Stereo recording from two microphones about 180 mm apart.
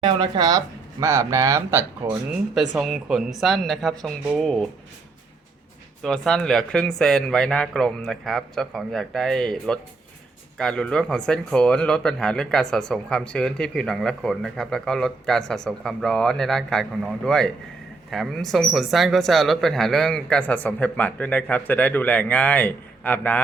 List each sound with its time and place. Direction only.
0.0 s speech: 25° right (ahead or behind); by 4.7 s centre (ahead or behind)
6.0 s speech: 5° left (ahead or behind)